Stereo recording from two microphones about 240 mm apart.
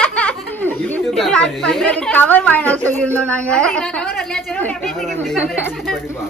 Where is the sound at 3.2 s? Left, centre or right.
Centre.